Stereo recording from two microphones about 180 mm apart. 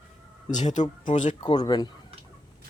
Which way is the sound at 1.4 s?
25° left (ahead or behind).